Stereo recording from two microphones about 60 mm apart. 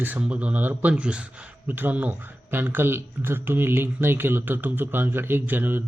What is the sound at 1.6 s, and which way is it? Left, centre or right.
Speech, right.